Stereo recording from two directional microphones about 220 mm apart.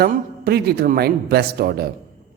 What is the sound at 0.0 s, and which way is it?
Speech, 45° right (ahead or behind).